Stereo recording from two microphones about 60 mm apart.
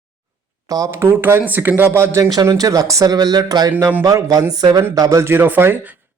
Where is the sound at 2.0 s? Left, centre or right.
Right.